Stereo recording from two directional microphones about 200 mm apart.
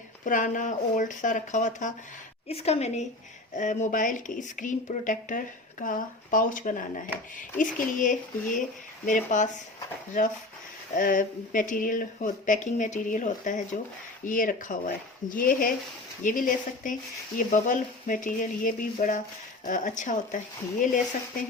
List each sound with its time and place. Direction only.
0.3 s speech: 40° left (ahead or behind)